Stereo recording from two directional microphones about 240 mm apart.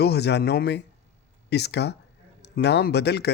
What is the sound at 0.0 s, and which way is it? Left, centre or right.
Speech, left.